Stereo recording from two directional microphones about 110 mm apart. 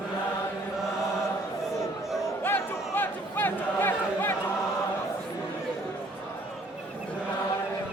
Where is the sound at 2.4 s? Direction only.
20° left (ahead or behind).